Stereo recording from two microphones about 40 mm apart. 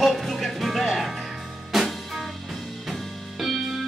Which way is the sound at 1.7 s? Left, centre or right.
Centre.